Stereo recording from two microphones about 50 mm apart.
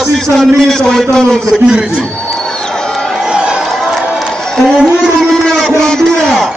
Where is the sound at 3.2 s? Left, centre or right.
Centre.